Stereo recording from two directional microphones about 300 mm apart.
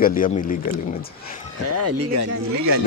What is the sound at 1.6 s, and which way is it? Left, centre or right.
Speech, right.